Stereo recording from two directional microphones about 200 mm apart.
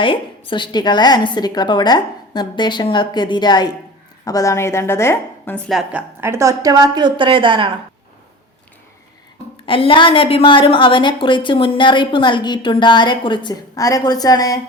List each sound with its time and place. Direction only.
0.0 s a woman's voice: 25° left (ahead or behind); by 7.7 s 25° right (ahead or behind)
9.6 s a woman's voice: 25° left (ahead or behind)